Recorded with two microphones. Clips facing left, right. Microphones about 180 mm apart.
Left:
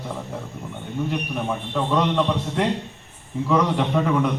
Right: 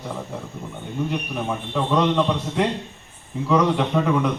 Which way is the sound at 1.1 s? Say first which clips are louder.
Even; centre (ahead or behind).